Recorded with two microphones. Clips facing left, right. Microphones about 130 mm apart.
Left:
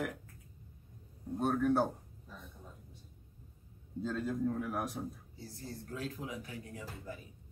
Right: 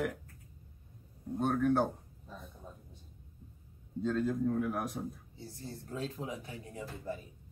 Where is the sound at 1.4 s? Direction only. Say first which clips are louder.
Right 1 dB; centre (ahead or behind).